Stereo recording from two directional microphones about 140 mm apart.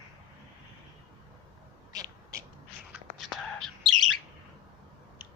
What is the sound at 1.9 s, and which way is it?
Owl, 25° right (ahead or behind).